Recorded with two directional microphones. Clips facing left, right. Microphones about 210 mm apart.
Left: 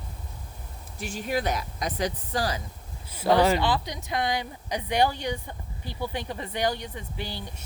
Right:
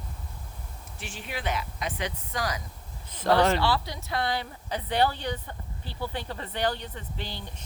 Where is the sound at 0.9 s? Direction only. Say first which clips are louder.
Left 9 dB; 40° left (ahead or behind).